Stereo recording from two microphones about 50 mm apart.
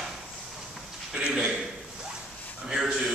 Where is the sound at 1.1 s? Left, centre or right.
Centre.